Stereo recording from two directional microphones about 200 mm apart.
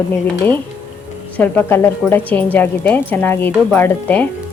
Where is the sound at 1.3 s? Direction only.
10° left (ahead or behind).